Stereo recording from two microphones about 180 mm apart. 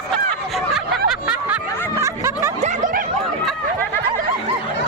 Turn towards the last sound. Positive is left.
turn(degrees=-45)  # may be behind; listen again after turning